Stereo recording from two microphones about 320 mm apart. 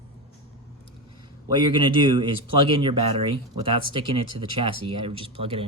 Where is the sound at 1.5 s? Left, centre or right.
Centre.